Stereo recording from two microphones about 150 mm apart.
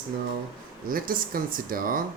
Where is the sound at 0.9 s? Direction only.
70° right (ahead or behind).